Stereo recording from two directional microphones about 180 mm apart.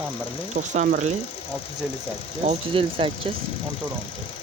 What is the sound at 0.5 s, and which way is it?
Speech, 40° right (ahead or behind).